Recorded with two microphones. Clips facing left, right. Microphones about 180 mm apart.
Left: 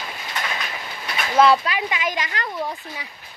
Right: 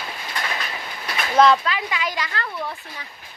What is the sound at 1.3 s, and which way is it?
Speech, 10° left (ahead or behind).